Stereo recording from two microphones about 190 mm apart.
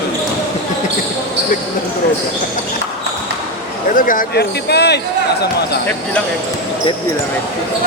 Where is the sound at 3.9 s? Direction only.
45° left (ahead or behind).